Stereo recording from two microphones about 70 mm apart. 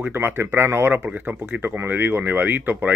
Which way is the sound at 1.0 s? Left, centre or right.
Right.